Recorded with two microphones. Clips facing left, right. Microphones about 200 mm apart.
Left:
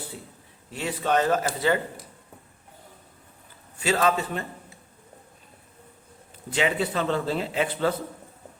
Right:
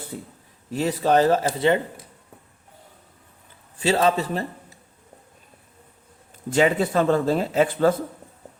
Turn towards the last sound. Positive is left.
turn(degrees=-45)  # may be behind; listen again after turning